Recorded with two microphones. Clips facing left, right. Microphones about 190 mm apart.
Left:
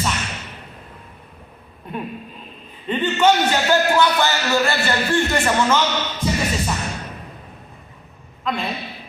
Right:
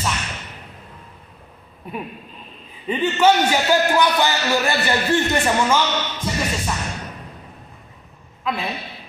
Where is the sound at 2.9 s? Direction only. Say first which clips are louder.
Even; 10° right (ahead or behind).